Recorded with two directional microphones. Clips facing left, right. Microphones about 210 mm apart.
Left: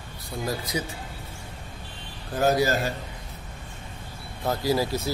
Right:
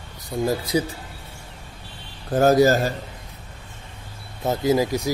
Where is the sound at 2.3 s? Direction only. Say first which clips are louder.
Right 7 dB; 45° right (ahead or behind).